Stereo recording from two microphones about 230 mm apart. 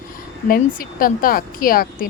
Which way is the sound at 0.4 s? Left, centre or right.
Left.